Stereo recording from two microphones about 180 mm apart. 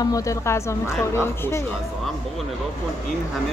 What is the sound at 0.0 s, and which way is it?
A woman's voice, 20° left (ahead or behind).